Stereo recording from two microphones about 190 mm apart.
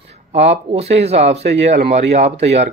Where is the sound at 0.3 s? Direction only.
35° right (ahead or behind).